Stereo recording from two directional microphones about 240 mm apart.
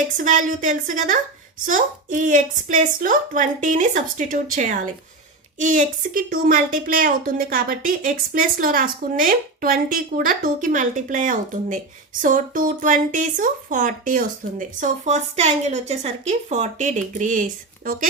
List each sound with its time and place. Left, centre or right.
0.2 s a woman's voice: right